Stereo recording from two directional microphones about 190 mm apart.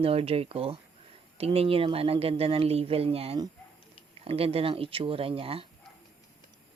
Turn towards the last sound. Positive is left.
turn(degrees=-30)  # may be behind; listen again after turning